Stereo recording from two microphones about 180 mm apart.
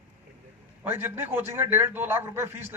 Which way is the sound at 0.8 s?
15° right (ahead or behind).